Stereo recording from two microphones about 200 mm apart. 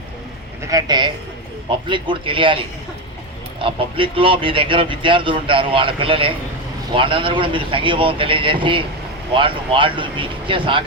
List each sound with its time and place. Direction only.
0.7 s speech: 20° right (ahead or behind)